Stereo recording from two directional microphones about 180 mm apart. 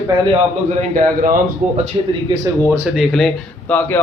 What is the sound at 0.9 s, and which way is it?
Speech, 50° right (ahead or behind).